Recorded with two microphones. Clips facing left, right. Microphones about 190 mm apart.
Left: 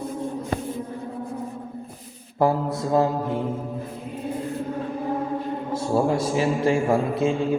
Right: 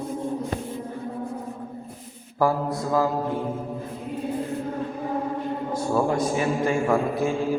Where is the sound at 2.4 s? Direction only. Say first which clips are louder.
Left 1 dB; 25° left (ahead or behind).